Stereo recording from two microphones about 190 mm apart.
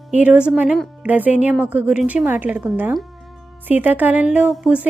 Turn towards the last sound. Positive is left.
turn(degrees=-5)  # may be behind; listen again after turning